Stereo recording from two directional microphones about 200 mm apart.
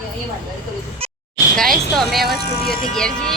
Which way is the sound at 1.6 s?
Centre (ahead or behind).